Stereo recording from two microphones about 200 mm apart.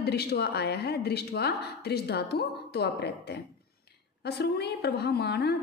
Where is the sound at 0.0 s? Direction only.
55° left (ahead or behind).